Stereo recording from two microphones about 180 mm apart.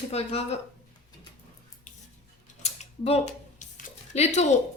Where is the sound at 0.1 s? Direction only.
35° left (ahead or behind).